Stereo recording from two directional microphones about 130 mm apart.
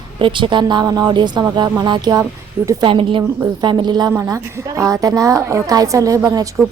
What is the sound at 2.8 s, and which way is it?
A woman's voice, 40° right (ahead or behind).